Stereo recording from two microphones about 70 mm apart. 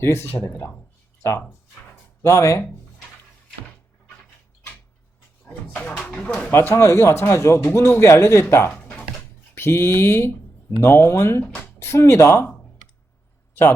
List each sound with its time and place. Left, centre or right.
0.0 s speech: left
2.2 s speech: left
6.5 s speech: left
8.7 s a sound: centre
9.6 s speech: left
13.5 s a sound: left